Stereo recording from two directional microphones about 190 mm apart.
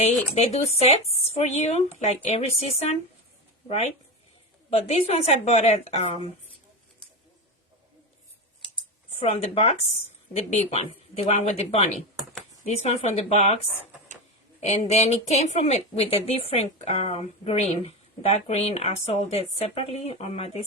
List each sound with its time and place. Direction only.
0.3 s a woman's voice: 35° left (ahead or behind)
4.7 s a woman's voice: 30° left (ahead or behind)
9.0 s a woman's voice: 35° left (ahead or behind)
14.6 s a woman's voice: 35° left (ahead or behind)